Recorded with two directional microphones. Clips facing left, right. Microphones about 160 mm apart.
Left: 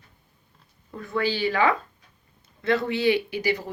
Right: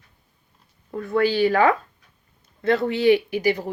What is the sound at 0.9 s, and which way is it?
Speech, 45° right (ahead or behind).